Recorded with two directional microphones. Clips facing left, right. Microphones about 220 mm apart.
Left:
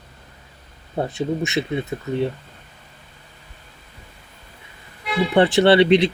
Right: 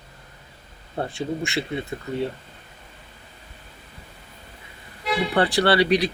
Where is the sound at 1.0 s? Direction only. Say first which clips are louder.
Left 4 dB; 20° left (ahead or behind).